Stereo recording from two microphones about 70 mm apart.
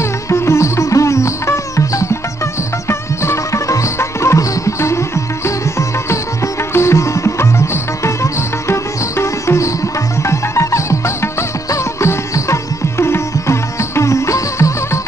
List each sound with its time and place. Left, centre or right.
0.3 s sitar: left
2.9 s music: left
6.7 s music: left
9.2 s sitar: left
10.2 s music: left
11.7 s sitar: left